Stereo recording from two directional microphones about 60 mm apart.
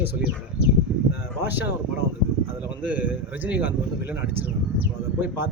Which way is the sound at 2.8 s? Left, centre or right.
Right.